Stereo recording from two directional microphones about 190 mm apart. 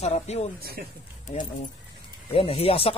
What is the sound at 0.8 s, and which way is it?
Speech, 60° right (ahead or behind).